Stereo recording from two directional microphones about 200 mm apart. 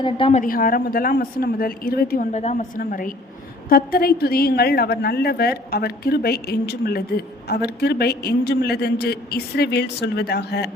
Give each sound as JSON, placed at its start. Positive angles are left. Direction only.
{"t": 0.0, "sound": "a woman's voice", "side_deg": 25}
{"t": 0.4, "sound": "a woman's voice", "side_deg": 45}
{"t": 2.3, "sound": "a woman's voice", "side_deg": 35}